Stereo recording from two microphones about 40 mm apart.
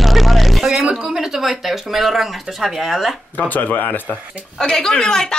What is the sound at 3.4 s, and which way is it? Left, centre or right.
Speech, left.